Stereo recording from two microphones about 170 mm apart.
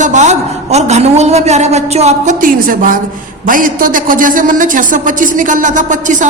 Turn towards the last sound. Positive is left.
turn(degrees=-45)  # may be behind; listen again after turning